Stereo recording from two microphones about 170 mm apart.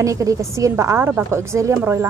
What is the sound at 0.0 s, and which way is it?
Speech, 20° right (ahead or behind).